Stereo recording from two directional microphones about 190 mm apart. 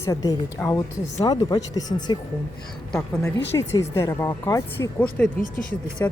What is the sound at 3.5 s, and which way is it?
Speech, 15° left (ahead or behind).